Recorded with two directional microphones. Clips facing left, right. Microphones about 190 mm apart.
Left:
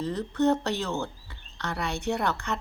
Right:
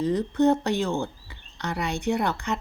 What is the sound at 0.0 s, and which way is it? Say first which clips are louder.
Speech: right 4 dB; 10° right (ahead or behind).